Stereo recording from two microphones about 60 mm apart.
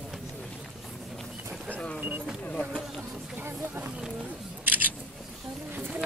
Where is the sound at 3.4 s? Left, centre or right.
Right.